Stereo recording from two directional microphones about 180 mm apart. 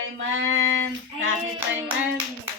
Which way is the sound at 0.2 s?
90° right.